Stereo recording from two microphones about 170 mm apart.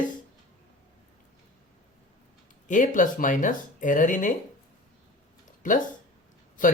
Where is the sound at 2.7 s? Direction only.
50° left (ahead or behind).